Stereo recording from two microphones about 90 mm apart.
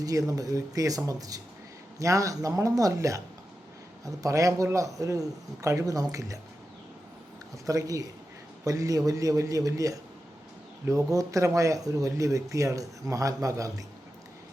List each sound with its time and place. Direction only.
0.0 s speech: 40° right (ahead or behind)
7.7 s speech: 40° right (ahead or behind)